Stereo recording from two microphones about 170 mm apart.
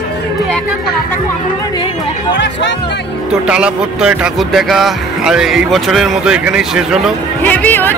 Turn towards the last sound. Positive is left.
turn(degrees=10)  # may be behind; listen again after turning